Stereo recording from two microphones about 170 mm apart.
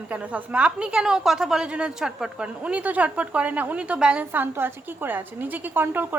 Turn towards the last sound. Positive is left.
turn(degrees=-10)  # may be behind; listen again after turning